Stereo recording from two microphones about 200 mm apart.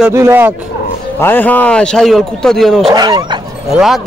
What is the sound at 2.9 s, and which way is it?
Speech, 20° right (ahead or behind).